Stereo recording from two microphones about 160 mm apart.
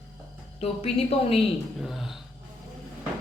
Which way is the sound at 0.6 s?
40° left (ahead or behind).